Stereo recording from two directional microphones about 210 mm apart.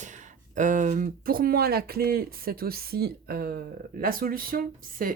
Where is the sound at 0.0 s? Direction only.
35° right (ahead or behind).